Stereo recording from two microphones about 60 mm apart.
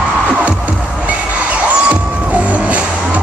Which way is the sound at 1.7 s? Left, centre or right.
Right.